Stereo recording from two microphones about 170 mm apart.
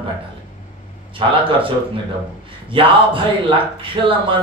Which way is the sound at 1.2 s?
30° right (ahead or behind).